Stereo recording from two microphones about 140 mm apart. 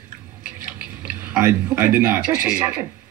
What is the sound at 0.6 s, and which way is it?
Speech, 10° right (ahead or behind).